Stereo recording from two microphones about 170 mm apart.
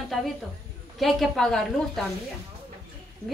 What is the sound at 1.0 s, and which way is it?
Speech, centre (ahead or behind).